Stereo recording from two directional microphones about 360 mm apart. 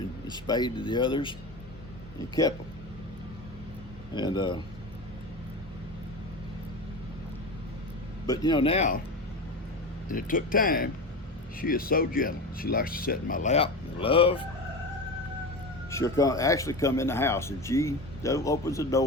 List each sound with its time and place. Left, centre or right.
0.3 s speech: centre
4.1 s speech: centre
8.3 s speech: centre
10.1 s speech: left
15.9 s speech: centre